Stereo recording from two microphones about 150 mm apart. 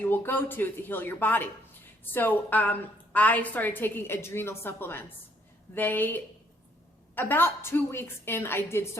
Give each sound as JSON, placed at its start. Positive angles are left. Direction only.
{"t": 0.0, "sound": "a woman's voice", "side_deg": 15}